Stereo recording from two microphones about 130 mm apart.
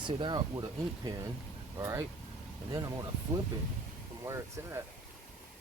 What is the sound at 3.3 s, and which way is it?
Speech, 15° right (ahead or behind).